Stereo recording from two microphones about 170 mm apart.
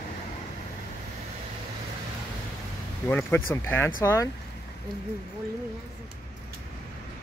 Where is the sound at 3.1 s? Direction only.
10° left (ahead or behind).